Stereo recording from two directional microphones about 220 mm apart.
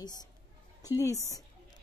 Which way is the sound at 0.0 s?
20° left (ahead or behind).